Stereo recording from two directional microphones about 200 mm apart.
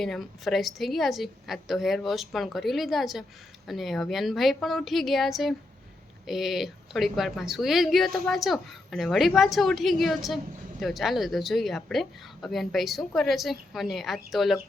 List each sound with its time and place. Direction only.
0.0 s a woman's voice: centre (ahead or behind)